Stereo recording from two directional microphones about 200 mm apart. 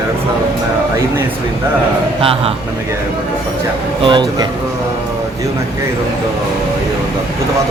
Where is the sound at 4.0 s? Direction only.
25° right (ahead or behind).